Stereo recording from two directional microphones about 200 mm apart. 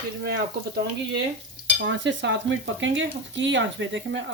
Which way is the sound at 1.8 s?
65° right (ahead or behind).